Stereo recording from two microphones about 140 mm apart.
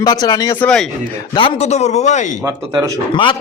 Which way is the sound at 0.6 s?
5° left (ahead or behind).